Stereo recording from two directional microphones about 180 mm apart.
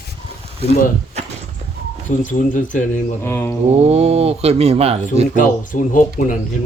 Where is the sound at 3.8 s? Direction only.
35° right (ahead or behind).